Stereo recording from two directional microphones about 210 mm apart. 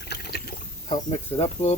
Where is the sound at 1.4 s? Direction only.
30° left (ahead or behind).